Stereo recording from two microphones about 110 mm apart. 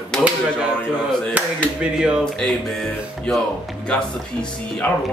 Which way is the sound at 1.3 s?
10° right (ahead or behind).